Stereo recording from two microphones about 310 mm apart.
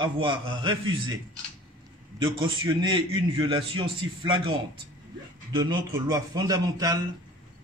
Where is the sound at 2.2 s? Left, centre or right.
Centre.